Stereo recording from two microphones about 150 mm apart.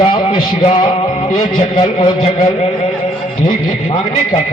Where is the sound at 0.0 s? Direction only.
35° left (ahead or behind).